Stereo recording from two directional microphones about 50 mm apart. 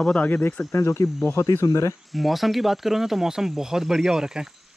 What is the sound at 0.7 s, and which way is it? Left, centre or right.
Speech, left.